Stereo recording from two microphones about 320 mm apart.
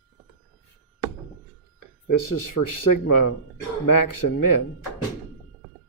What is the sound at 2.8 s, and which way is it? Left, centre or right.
Speech, left.